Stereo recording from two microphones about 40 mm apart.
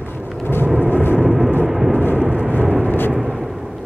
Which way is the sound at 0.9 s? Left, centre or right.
Left.